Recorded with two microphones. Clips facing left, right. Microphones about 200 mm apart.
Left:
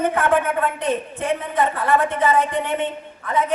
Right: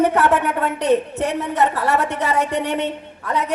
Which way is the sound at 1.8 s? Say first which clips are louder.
Left 1 dB; 75° right (ahead or behind).